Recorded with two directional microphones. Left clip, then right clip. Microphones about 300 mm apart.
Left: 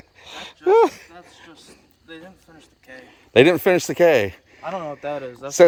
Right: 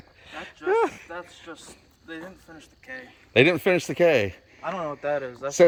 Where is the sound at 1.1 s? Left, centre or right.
Centre.